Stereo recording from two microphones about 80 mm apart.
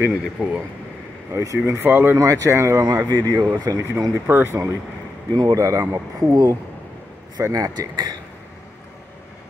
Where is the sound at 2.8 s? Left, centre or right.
Right.